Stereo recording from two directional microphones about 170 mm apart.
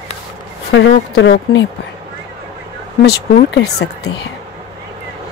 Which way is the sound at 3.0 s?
75° left (ahead or behind).